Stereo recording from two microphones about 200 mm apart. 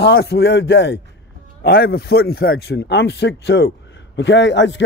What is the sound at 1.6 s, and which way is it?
A man's voice, 50° left (ahead or behind).